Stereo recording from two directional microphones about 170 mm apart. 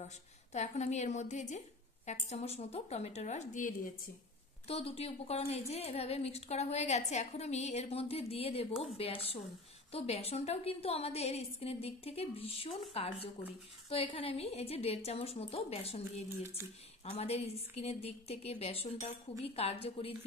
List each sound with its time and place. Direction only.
0.0 s a woman's voice: 40° left (ahead or behind)